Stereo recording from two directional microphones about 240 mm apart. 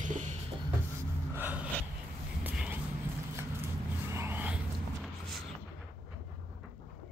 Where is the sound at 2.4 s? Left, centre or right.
Centre.